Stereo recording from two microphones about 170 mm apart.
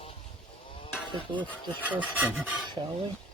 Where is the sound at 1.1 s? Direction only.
30° right (ahead or behind).